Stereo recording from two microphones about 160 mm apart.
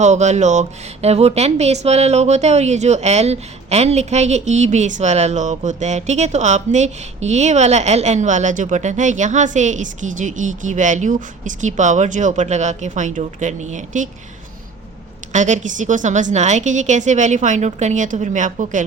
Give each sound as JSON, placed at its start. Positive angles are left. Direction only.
{"t": 0.0, "sound": "speech", "side_deg": -45}
{"t": 15.3, "sound": "speech", "side_deg": -50}